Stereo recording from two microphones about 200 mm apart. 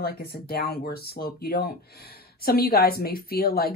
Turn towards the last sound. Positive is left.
turn(degrees=50)  # may be behind; listen again after turning